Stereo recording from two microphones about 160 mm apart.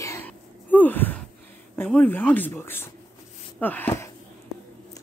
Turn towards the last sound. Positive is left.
turn(degrees=15)  # may be behind; listen again after turning